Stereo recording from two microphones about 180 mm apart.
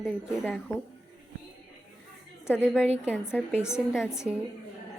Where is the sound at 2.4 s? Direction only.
10° left (ahead or behind).